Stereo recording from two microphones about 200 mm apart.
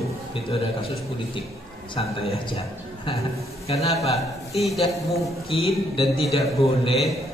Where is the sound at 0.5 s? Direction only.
30° left (ahead or behind).